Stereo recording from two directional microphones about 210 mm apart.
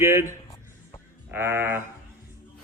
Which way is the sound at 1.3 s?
10° right (ahead or behind).